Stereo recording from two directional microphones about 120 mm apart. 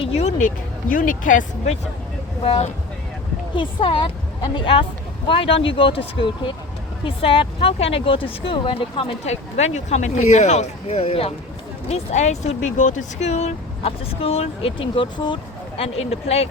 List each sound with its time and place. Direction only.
0.0 s speech: 60° left (ahead or behind); by 0.5 s 80° left
1.2 s speech: 90° left
2.4 s speech: 55° left (ahead or behind)
11.9 s speech: 75° left (ahead or behind); by 15.4 s 40° left (ahead or behind)
15.8 s speech: 60° left (ahead or behind)